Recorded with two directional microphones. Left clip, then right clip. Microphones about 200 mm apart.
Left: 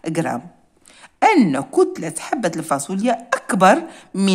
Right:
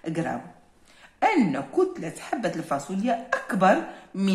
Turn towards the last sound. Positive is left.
turn(degrees=45)  # may be behind; listen again after turning